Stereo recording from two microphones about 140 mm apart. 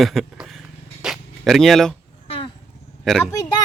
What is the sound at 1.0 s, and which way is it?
Zipper, centre (ahead or behind).